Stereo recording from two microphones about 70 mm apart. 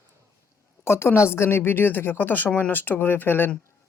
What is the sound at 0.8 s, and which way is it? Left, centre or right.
Speech, left.